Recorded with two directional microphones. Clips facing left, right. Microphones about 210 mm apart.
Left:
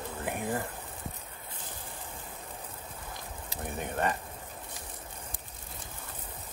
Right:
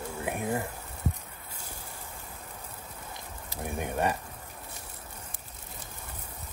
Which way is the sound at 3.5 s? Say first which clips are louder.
Right 3 dB; 15° right (ahead or behind).